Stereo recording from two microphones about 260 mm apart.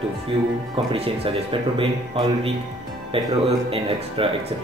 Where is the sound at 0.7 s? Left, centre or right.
Right.